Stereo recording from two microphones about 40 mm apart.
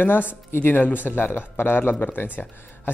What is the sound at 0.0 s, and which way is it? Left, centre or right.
Speech, left.